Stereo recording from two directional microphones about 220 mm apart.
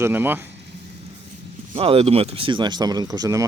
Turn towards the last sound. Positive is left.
turn(degrees=-15)  # may be behind; listen again after turning